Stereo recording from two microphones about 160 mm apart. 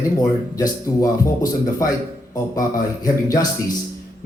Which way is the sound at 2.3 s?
20° left (ahead or behind).